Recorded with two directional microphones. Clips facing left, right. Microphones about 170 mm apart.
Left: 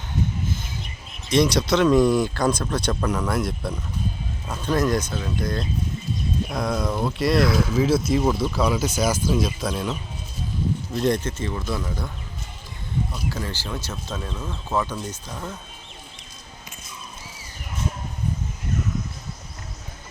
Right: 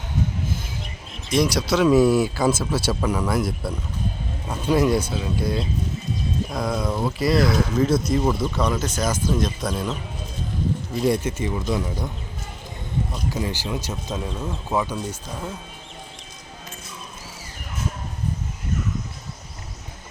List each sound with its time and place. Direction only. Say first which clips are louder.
1.3 s speech: left 1 dB; 5° right (ahead or behind)
10.9 s speech: right 1 dB; 5° right (ahead or behind)
13.3 s speech: right 4 dB; 15° right (ahead or behind)